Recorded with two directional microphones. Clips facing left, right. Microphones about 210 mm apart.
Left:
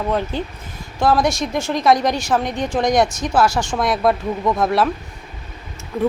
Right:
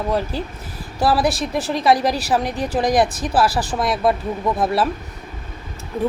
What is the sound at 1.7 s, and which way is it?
Speech, 5° right (ahead or behind).